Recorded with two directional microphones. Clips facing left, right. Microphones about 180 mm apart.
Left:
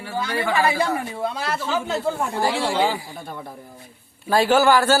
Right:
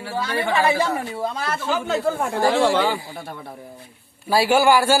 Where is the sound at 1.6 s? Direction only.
50° right (ahead or behind).